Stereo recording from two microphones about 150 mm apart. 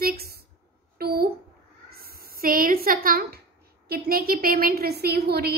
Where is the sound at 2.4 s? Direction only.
70° right (ahead or behind); by 5.5 s 90° right.